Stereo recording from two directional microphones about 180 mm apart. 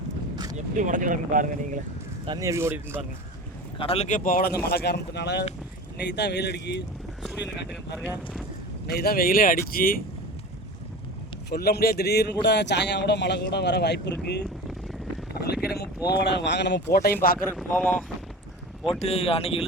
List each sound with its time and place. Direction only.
0.5 s speech: 45° right (ahead or behind)
2.2 s speech: 20° right (ahead or behind)
3.8 s speech: 35° left (ahead or behind); by 4.5 s 50° left (ahead or behind)
4.7 s speech: 65° left (ahead or behind)
7.2 s speech: centre (ahead or behind)
9.0 s speech: 55° left (ahead or behind)
11.4 s speech: 60° left (ahead or behind)
16.0 s speech: 70° left (ahead or behind)
17.3 s speech: 10° left (ahead or behind)
18.9 s speech: 35° left (ahead or behind)